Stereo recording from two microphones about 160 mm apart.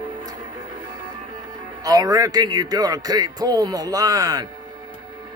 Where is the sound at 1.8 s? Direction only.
25° right (ahead or behind).